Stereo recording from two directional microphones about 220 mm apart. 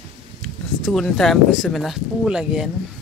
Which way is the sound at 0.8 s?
Centre (ahead or behind).